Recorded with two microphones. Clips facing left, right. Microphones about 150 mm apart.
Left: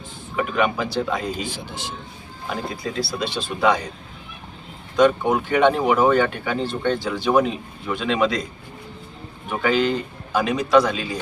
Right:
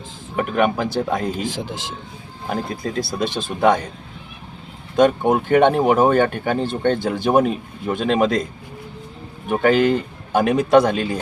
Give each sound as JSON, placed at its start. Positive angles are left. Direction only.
{"t": 0.3, "sound": "speech", "side_deg": -50}
{"t": 1.5, "sound": "a man's voice", "side_deg": -90}
{"t": 2.5, "sound": "speech", "side_deg": -50}
{"t": 2.8, "sound": "speech", "side_deg": -40}
{"t": 4.9, "sound": "speech", "side_deg": -50}
{"t": 9.5, "sound": "speech", "side_deg": -50}